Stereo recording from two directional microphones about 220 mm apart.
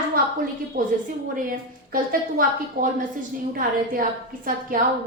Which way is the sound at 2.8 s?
40° right (ahead or behind).